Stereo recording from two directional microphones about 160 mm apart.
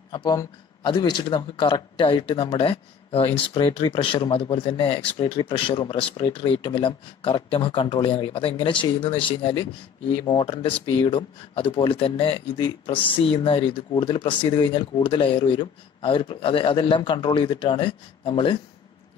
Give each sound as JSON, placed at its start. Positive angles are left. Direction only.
{"t": 0.1, "sound": "speech", "side_deg": 25}